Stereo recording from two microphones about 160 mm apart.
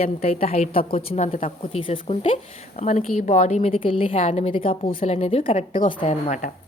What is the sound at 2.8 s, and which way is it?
A woman's voice, 50° left (ahead or behind).